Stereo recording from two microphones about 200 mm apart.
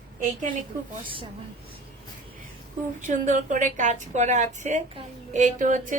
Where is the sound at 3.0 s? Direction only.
40° right (ahead or behind).